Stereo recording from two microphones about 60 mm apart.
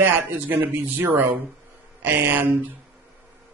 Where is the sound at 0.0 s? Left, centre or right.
Right.